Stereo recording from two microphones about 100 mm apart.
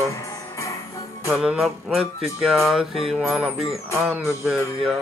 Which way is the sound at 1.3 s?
5° right (ahead or behind).